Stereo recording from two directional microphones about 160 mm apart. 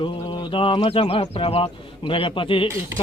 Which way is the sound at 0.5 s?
35° left (ahead or behind).